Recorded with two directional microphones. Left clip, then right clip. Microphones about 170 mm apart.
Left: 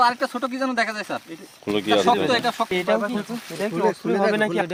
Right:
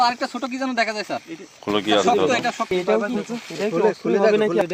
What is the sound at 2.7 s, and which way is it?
Speech, 45° left (ahead or behind).